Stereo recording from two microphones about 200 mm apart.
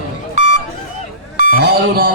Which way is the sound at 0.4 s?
40° right (ahead or behind).